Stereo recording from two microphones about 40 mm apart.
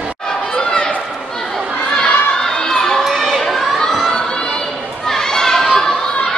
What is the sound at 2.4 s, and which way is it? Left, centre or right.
Crowd, centre.